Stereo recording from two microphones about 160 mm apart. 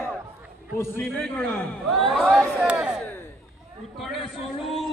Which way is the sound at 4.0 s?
Centre (ahead or behind).